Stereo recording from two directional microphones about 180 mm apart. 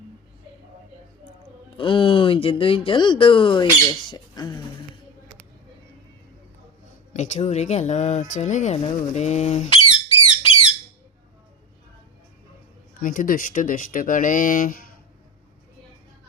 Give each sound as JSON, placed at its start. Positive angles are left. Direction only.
{"t": 1.7, "sound": "speech", "side_deg": 30}
{"t": 4.1, "sound": "a sound", "side_deg": 25}
{"t": 7.1, "sound": "speech", "side_deg": 40}
{"t": 13.0, "sound": "speech", "side_deg": 50}